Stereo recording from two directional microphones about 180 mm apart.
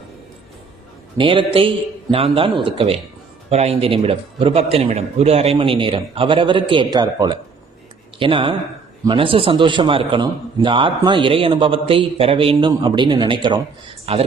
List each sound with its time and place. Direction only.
1.2 s a man's voice: 30° right (ahead or behind)